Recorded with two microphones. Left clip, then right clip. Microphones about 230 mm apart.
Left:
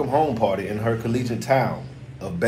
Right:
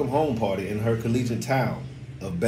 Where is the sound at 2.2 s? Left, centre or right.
Centre.